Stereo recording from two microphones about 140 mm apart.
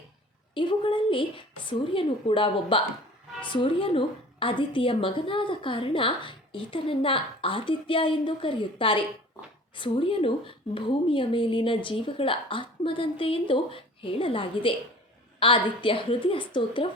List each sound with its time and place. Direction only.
0.5 s a woman's voice: 35° left (ahead or behind)